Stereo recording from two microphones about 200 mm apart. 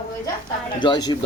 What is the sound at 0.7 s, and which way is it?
Speech, 25° left (ahead or behind).